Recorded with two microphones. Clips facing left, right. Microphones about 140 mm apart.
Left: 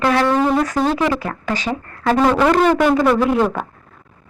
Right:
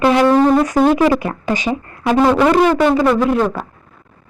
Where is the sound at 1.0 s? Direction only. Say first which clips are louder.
Right 5 dB; 15° right (ahead or behind).